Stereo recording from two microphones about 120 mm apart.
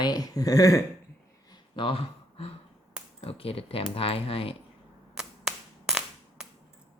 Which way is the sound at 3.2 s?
50° left (ahead or behind).